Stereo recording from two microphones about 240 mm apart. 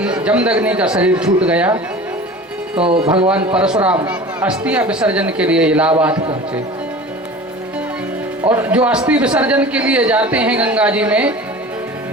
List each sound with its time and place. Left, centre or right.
0.0 s a man's voice: centre
2.7 s speech: right
3.2 s a man's voice: centre
8.4 s a man's voice: centre